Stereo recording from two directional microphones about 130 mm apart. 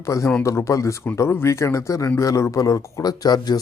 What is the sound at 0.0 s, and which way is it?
A man's voice, 25° left (ahead or behind).